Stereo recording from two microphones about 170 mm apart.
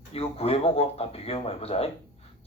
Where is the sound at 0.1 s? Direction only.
35° left (ahead or behind).